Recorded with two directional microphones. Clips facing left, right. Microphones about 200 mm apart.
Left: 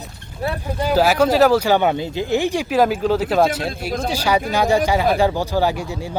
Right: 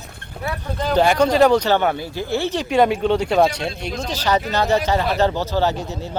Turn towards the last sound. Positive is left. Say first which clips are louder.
# left 1 dB
turn(degrees=10)  # may be behind; listen again after turning